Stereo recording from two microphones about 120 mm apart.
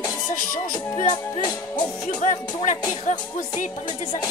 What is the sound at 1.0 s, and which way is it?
Music, 80° left.